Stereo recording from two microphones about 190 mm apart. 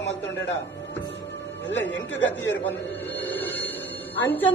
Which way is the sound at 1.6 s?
75° left (ahead or behind).